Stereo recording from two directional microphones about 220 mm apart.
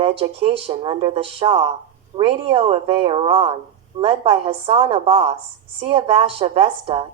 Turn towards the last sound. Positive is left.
turn(degrees=-25)  # may be behind; listen again after turning